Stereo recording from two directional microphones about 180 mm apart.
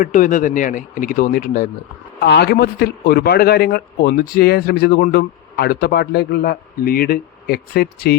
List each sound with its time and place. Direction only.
0.0 s speech: 45° left (ahead or behind)
2.2 s a man's voice: 65° left (ahead or behind)